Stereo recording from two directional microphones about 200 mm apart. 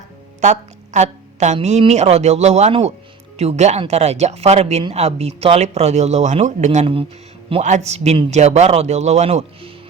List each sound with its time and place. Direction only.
0.4 s speech: 35° right (ahead or behind)